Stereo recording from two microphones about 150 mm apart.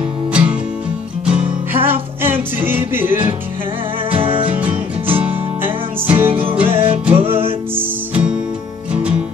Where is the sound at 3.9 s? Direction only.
40° right (ahead or behind).